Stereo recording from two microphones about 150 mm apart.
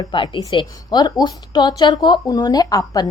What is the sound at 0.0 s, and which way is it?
A woman's voice, 30° left (ahead or behind).